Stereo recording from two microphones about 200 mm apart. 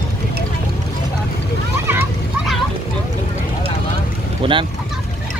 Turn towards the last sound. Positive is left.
turn(degrees=-25)  # may be behind; listen again after turning